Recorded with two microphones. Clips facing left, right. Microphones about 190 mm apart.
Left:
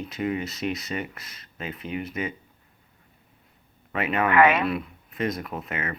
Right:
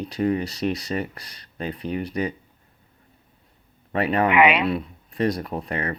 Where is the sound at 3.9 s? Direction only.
35° right (ahead or behind).